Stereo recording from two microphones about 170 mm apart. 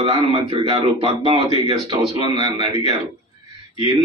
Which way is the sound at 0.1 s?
30° right (ahead or behind).